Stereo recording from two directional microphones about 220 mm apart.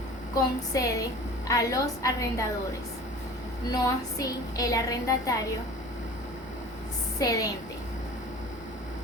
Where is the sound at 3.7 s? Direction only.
15° left (ahead or behind).